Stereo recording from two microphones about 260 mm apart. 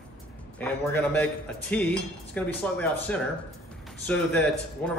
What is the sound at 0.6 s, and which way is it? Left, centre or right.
Speech, centre.